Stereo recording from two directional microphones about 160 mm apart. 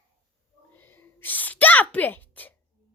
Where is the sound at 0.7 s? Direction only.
10° left (ahead or behind).